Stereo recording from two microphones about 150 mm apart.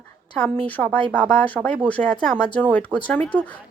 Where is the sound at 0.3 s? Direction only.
5° left (ahead or behind).